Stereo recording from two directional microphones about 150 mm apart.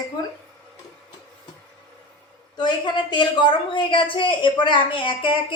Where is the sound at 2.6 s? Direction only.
30° left (ahead or behind).